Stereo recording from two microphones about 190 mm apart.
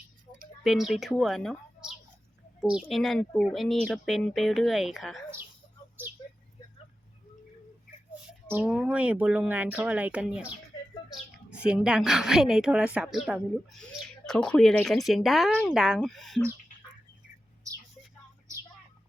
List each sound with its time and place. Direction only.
0.6 s a woman's voice: centre (ahead or behind)
8.4 s speech: 10° right (ahead or behind)
11.6 s a woman's voice: 5° right (ahead or behind)
17.7 s a sound: 15° right (ahead or behind)